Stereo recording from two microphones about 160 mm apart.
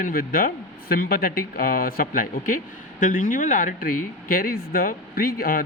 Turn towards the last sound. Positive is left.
turn(degrees=70)  # may be behind; listen again after turning